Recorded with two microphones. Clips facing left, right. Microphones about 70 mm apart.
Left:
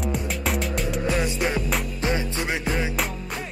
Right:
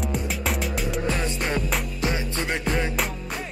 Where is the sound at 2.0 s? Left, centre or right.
Left.